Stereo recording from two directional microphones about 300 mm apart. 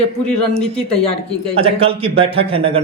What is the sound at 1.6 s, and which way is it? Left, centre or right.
Speech, centre.